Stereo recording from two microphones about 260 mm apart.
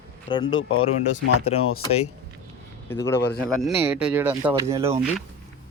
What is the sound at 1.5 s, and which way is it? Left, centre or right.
Speech, left.